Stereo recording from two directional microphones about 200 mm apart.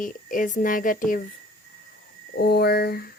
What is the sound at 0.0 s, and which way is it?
Speech, 40° left (ahead or behind).